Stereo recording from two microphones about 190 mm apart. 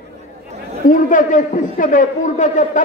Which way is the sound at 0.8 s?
45° left (ahead or behind).